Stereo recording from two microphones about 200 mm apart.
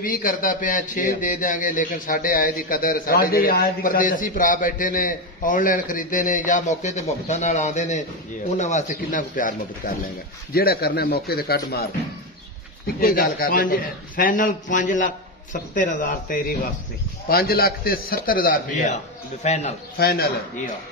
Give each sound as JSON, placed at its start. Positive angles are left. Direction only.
{"t": 0.0, "sound": "a man's voice", "side_deg": 45}
{"t": 20.0, "sound": "a man's voice", "side_deg": 50}